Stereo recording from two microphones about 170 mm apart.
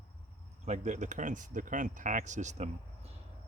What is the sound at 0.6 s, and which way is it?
Speech, 45° right (ahead or behind).